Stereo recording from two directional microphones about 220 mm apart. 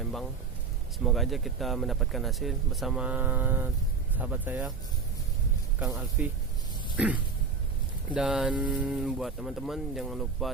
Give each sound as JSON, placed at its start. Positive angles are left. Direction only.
{"t": 0.9, "sound": "speech", "side_deg": 0}
{"t": 5.8, "sound": "speech", "side_deg": -5}
{"t": 6.9, "sound": "a sound", "side_deg": -5}
{"t": 8.1, "sound": "speech", "side_deg": -5}